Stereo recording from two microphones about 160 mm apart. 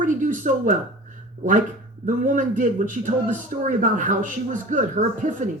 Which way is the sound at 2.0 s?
55° right (ahead or behind).